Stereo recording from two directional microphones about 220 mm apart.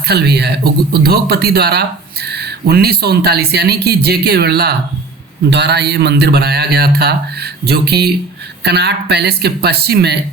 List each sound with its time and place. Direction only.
0.0 s speech: 45° right (ahead or behind)